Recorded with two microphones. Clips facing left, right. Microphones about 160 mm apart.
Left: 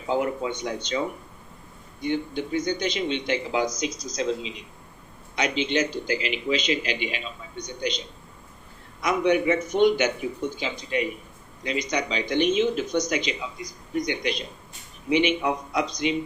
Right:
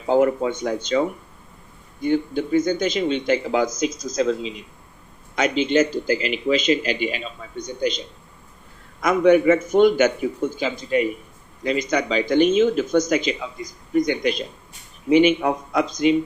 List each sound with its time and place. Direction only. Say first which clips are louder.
0.1 s speech: right 7 dB; 45° right (ahead or behind)